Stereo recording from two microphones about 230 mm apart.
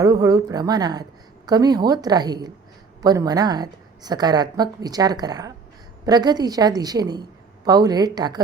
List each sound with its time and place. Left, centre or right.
0.0 s a woman's voice: centre